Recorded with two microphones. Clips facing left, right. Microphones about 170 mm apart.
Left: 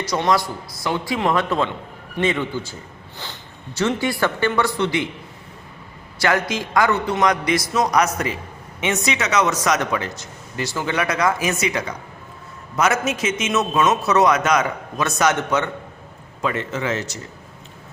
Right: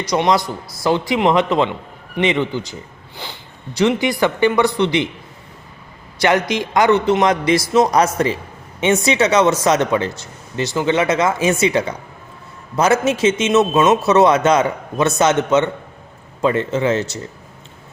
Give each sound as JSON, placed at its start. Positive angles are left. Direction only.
{"t": 0.0, "sound": "a man's voice", "side_deg": -20}
{"t": 3.8, "sound": "speech", "side_deg": -15}
{"t": 6.1, "sound": "a man's voice", "side_deg": -20}